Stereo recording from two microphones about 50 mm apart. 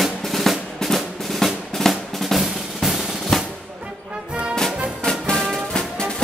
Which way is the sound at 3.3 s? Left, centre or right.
Centre.